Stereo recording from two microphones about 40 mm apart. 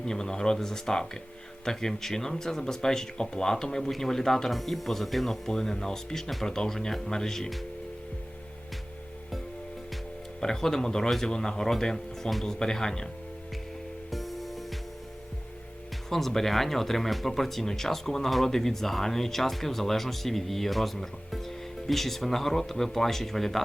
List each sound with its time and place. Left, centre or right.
0.0 s speech: centre
10.4 s speech: centre
14.1 s music: centre
16.0 s speech: centre